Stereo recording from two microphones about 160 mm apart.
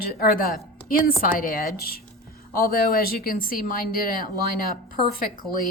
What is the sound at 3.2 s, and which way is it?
A woman's voice, 60° left (ahead or behind).